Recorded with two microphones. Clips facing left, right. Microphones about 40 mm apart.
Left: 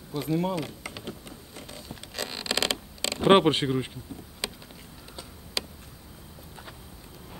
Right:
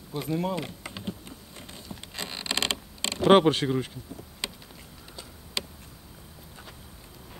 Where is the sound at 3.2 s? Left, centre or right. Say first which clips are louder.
Right 1 dB; centre.